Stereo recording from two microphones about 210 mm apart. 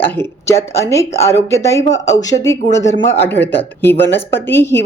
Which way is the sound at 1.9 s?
35° left (ahead or behind).